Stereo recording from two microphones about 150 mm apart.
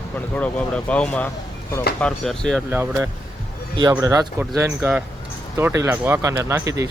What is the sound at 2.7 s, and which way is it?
Speech, 20° right (ahead or behind).